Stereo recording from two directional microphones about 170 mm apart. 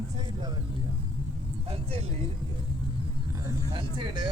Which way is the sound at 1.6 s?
35° right (ahead or behind).